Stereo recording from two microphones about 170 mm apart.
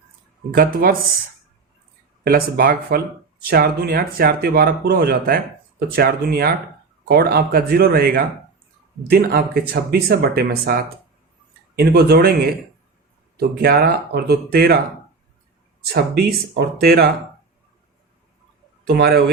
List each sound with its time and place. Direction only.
0.5 s speech: 60° right (ahead or behind)
2.2 s speech: 60° right (ahead or behind)
15.9 s speech: 65° right (ahead or behind)
18.9 s speech: 65° right (ahead or behind)